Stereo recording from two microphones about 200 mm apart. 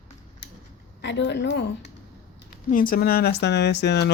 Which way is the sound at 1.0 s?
60° left (ahead or behind).